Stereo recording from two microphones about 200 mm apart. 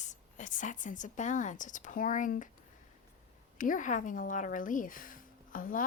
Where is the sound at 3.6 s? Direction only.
40° left (ahead or behind).